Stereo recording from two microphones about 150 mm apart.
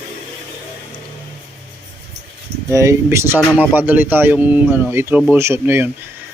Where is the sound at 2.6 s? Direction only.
20° right (ahead or behind).